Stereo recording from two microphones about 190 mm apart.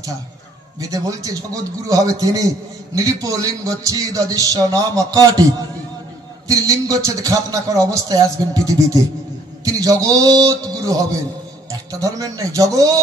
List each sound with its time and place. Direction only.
0.7 s a man's voice: 20° right (ahead or behind)